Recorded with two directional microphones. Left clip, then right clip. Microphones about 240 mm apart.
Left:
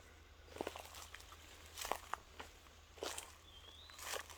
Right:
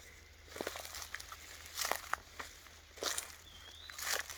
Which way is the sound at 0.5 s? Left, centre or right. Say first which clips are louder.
Right 4 dB; right.